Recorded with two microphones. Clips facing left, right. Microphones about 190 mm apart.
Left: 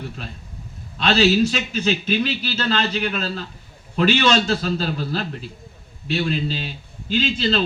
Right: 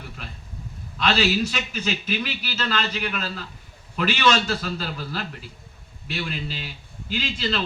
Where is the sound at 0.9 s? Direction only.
30° left (ahead or behind).